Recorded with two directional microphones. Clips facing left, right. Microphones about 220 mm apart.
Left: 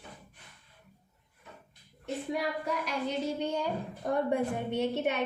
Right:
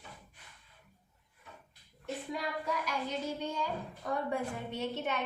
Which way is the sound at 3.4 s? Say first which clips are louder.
Left 5 dB; 65° left (ahead or behind).